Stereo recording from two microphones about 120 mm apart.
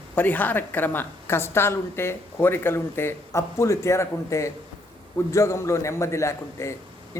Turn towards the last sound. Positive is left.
turn(degrees=25)  # may be behind; listen again after turning